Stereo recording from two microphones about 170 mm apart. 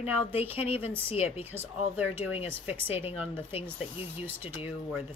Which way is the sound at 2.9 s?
35° left (ahead or behind).